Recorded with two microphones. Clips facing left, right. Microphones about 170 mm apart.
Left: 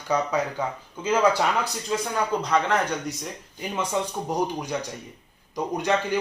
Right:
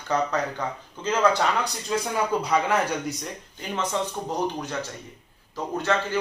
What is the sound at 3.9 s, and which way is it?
Speech, 10° left (ahead or behind).